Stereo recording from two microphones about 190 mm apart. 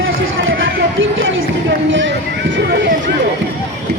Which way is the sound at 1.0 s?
90° right.